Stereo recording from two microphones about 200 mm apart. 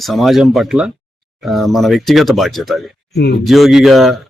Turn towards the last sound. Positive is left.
turn(degrees=0)  # may be behind; listen again after turning